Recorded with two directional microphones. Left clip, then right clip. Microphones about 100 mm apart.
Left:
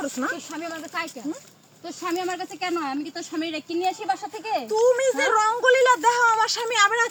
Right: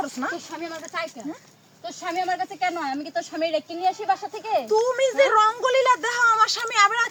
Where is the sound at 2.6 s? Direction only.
25° right (ahead or behind).